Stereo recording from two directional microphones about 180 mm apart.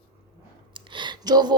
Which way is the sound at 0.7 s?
25° right (ahead or behind).